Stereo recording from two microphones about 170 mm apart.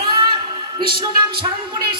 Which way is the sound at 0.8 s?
30° right (ahead or behind).